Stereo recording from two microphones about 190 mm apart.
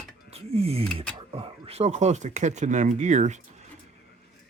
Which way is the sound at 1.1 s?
30° right (ahead or behind).